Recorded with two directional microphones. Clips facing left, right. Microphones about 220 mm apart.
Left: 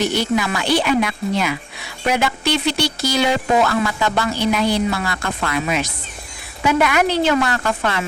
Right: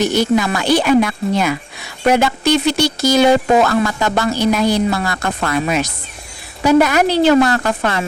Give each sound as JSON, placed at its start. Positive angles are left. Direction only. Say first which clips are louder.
{"t": 0.0, "sound": "a woman's voice", "louder": "right 4 dB", "side_deg": -45}